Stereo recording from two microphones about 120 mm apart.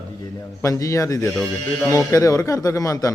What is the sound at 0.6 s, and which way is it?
A man's voice, 25° left (ahead or behind).